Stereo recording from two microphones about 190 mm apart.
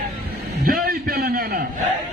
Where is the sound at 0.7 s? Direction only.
50° right (ahead or behind).